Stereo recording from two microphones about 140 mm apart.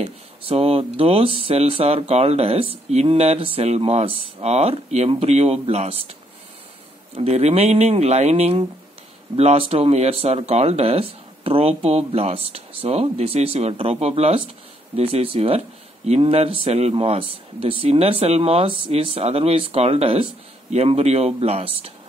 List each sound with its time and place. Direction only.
0.0 s speech: 45° right (ahead or behind)
7.2 s speech: 50° right (ahead or behind)